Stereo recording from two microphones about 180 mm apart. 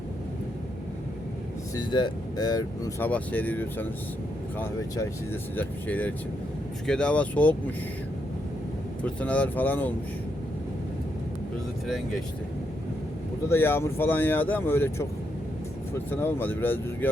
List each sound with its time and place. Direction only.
1.7 s speech: 25° left (ahead or behind)
3.1 s speech: 10° left (ahead or behind)
9.0 s speech: 5° left (ahead or behind)
13.5 s speech: 15° left (ahead or behind)
16.0 s speech: 10° left (ahead or behind)